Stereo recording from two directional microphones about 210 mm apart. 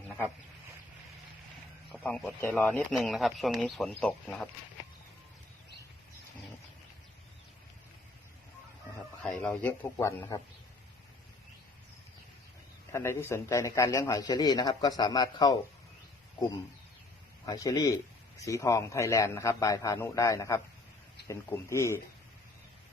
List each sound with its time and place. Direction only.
1.9 s speech: 5° left (ahead or behind)
9.2 s a man's voice: 5° left (ahead or behind)
12.9 s a man's voice: 15° left (ahead or behind)
17.4 s a man's voice: 15° left (ahead or behind)